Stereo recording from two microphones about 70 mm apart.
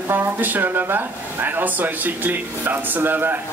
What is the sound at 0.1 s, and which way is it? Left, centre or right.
Speech, right.